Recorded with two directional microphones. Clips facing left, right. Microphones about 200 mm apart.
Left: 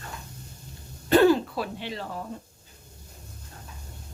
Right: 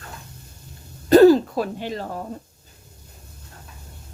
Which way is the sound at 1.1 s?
40° right (ahead or behind).